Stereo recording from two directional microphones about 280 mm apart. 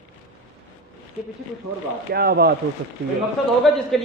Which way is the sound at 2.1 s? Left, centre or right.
Right.